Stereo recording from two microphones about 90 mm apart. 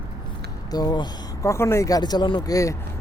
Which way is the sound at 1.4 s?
30° left (ahead or behind).